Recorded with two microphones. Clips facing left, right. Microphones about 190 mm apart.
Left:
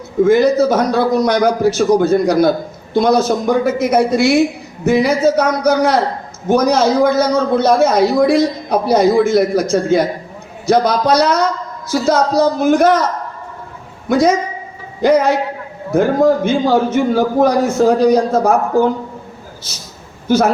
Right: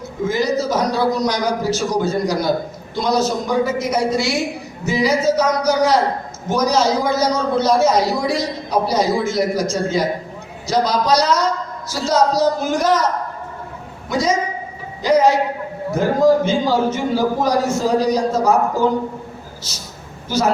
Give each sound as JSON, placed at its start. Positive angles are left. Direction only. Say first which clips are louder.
{"t": 0.3, "sound": "a man's voice", "louder": "left 7 dB", "side_deg": 55}
{"t": 14.1, "sound": "a man's voice", "louder": "left 6 dB", "side_deg": 55}